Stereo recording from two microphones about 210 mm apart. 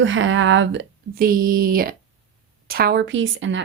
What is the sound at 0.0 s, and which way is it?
Speech, 65° right (ahead or behind).